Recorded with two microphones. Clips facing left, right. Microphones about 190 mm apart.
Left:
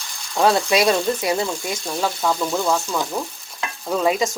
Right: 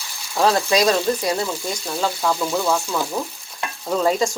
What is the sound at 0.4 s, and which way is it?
Speech, 20° left (ahead or behind).